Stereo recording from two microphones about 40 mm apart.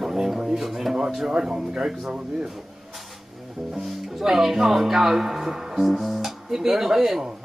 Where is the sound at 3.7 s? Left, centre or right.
Centre.